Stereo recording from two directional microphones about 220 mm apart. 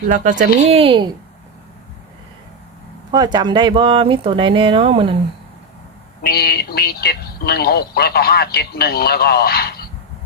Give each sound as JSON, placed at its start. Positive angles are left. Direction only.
{"t": 0.1, "sound": "speech", "side_deg": -35}
{"t": 3.1, "sound": "speech", "side_deg": -20}
{"t": 6.2, "sound": "speech", "side_deg": 45}